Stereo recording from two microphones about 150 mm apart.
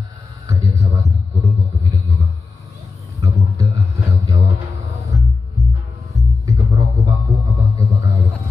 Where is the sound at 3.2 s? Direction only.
20° right (ahead or behind).